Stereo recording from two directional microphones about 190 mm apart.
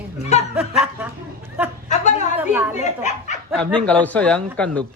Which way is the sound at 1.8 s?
40° left (ahead or behind).